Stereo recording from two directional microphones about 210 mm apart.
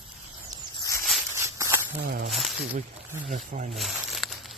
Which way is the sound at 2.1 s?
45° right (ahead or behind).